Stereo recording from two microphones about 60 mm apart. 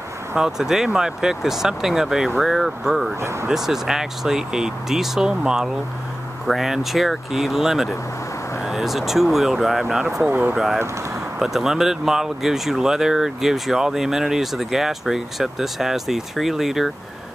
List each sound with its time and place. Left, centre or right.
0.4 s speech: centre
3.2 s speech: right
3.4 s speech: centre